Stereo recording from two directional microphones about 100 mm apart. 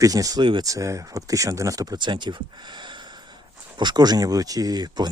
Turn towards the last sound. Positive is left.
turn(degrees=-45)  # may be behind; listen again after turning